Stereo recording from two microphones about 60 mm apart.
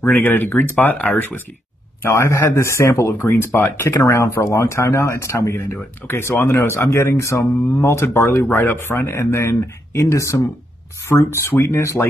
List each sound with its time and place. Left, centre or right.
0.0 s speech: left
0.9 s speech: left
2.0 s speech: left
3.0 s speech: left
4.0 s speech: left
7.7 s speech: left